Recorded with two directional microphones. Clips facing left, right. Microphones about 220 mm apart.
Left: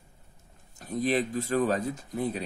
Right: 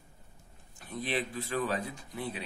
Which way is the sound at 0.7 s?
40° left (ahead or behind).